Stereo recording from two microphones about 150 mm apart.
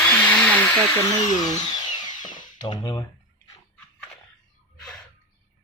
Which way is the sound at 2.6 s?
30° left (ahead or behind).